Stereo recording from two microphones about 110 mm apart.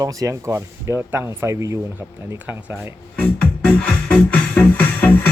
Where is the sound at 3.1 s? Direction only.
10° left (ahead or behind).